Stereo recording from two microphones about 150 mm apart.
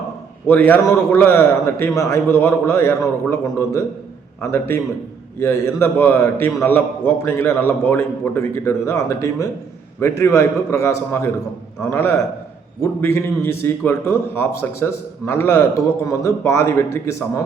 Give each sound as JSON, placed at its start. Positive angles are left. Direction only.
{"t": 0.4, "sound": "a man's voice", "side_deg": 15}